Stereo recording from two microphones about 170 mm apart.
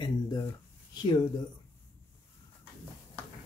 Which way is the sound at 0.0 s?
20° left (ahead or behind).